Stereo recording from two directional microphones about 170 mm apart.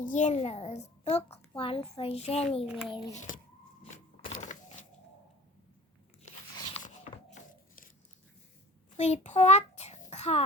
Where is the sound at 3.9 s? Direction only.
45° left (ahead or behind).